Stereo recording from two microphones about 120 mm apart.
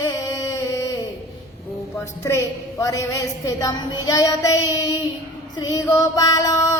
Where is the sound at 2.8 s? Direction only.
30° left (ahead or behind).